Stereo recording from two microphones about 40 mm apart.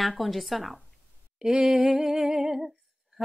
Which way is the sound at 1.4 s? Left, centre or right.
Centre.